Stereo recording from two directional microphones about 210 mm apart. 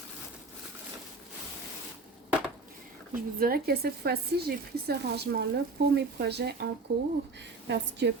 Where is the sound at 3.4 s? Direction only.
45° right (ahead or behind).